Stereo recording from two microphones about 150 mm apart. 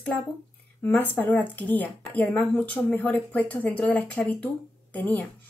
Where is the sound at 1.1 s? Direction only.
10° left (ahead or behind).